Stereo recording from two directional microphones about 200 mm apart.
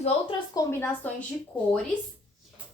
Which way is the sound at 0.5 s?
10° left (ahead or behind).